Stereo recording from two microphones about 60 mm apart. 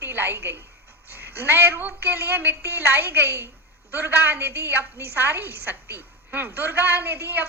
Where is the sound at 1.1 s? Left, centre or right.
Right.